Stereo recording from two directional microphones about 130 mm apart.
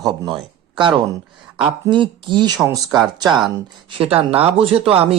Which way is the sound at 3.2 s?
35° right (ahead or behind).